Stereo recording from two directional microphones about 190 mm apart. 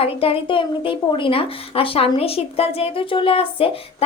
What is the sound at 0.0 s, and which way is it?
A woman's voice, 30° left (ahead or behind).